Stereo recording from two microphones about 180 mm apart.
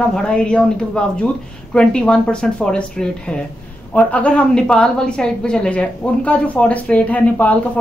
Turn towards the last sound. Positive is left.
turn(degrees=10)  # may be behind; listen again after turning